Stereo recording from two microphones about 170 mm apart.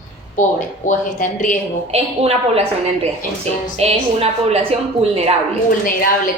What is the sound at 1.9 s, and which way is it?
Speech, 35° right (ahead or behind).